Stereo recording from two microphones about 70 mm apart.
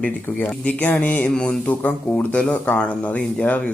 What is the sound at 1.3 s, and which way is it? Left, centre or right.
Speech, centre.